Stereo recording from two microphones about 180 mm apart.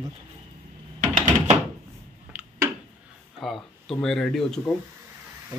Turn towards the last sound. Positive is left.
turn(degrees=5)  # may be behind; listen again after turning